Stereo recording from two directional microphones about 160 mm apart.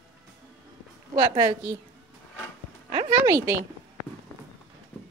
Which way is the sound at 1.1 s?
25° right (ahead or behind).